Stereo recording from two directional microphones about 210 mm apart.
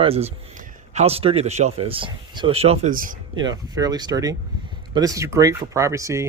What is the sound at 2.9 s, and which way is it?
Speech, 40° right (ahead or behind).